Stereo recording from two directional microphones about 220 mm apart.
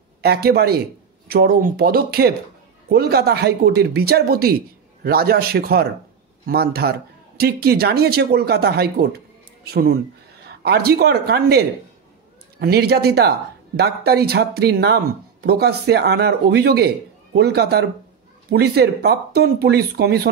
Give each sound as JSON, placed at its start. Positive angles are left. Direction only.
{"t": 0.2, "sound": "speech", "side_deg": -45}